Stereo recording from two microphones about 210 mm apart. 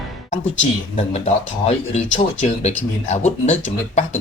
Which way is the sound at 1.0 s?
30° left (ahead or behind).